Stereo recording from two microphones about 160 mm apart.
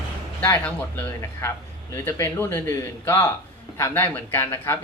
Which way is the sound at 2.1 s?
20° left (ahead or behind).